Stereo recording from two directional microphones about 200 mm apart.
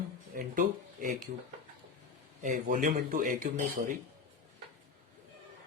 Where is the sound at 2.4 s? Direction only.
40° right (ahead or behind).